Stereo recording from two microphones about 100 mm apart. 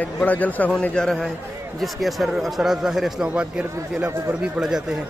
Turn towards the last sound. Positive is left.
turn(degrees=-5)  # may be behind; listen again after turning